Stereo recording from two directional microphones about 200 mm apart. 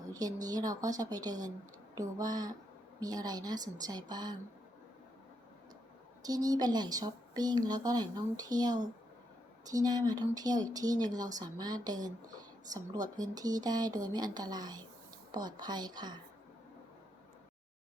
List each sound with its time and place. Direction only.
0.1 s speech: 20° right (ahead or behind)
6.2 s speech: 20° right (ahead or behind)